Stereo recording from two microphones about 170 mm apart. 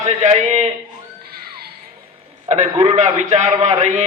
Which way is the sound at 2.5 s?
45° right (ahead or behind).